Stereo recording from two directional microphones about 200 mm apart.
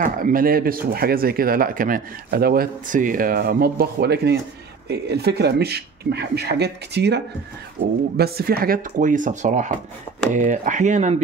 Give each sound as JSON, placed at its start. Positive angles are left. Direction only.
{"t": 0.0, "sound": "speech", "side_deg": -45}